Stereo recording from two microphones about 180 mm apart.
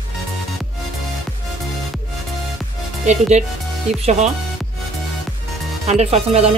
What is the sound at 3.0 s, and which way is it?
Speech, 40° right (ahead or behind).